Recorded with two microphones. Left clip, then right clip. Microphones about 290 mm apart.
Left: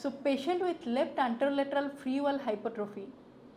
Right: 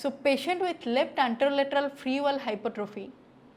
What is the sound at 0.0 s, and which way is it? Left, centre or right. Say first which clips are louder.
A woman's voice: right 5 dB; right.